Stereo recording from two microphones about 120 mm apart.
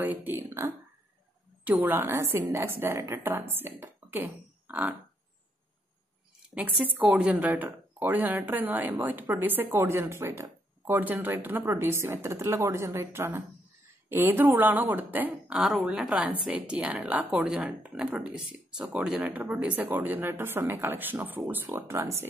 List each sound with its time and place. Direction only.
0.0 s a sound: 15° right (ahead or behind)
1.6 s a woman's voice: 15° right (ahead or behind)
6.5 s a woman's voice: 15° right (ahead or behind)